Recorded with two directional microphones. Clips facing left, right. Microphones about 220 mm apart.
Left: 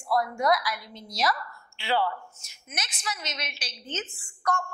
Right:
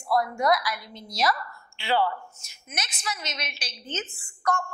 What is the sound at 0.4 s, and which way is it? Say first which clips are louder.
A woman's voice: right 1 dB; 10° right (ahead or behind).